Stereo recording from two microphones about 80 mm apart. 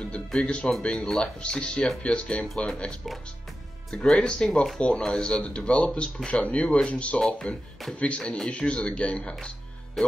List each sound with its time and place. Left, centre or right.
0.0 s speech: centre
2.4 s speech: centre
10.0 s speech: centre